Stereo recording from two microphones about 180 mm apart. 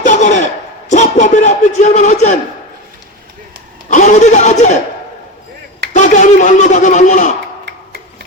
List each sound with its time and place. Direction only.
0.0 s a sound: 45° left (ahead or behind)
3.8 s a man's voice: 45° left (ahead or behind)
5.9 s a man's voice: 45° left (ahead or behind)